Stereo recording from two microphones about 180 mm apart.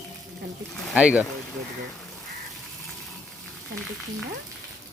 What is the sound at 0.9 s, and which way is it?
Speech, 5° right (ahead or behind).